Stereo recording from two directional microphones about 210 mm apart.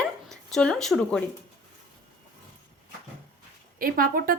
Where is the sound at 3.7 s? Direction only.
40° right (ahead or behind).